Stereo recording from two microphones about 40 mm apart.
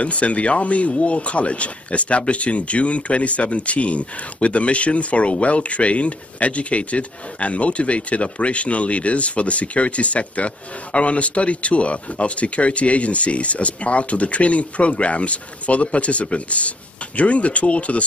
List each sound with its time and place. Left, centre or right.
0.0 s speech: left